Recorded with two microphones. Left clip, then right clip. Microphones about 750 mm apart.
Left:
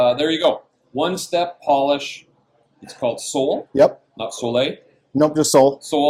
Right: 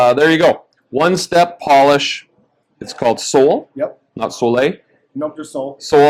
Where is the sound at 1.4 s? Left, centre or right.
Right.